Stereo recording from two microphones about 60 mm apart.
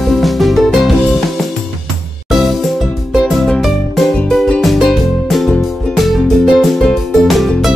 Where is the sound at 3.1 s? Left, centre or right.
Centre.